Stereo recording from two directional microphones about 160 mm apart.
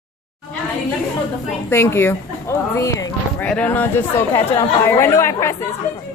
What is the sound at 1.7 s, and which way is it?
Speech, 15° left (ahead or behind).